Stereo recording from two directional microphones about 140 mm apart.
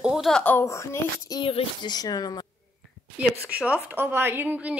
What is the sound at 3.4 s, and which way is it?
A woman's voice, 10° right (ahead or behind).